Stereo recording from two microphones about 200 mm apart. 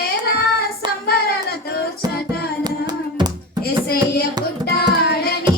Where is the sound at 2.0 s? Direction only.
20° right (ahead or behind).